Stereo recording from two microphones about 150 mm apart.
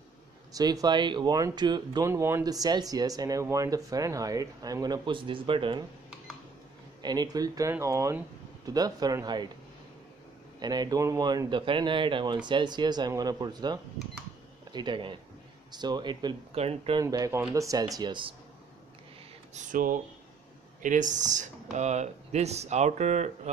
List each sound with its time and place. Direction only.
0.5 s speech: 25° right (ahead or behind)
2.0 s speech: 15° right (ahead or behind); by 5.9 s 35° right (ahead or behind)
7.0 s speech: 25° right (ahead or behind)
10.6 s speech: 25° right (ahead or behind)
16.5 s speech: 40° right (ahead or behind)
17.0 s speech: 20° right (ahead or behind)
19.5 s speech: 65° right (ahead or behind)